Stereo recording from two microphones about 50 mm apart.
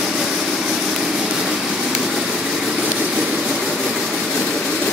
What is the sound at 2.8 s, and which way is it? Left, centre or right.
Vehicle, right.